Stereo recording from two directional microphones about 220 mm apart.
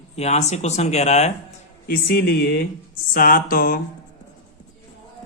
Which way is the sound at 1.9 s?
45° left (ahead or behind).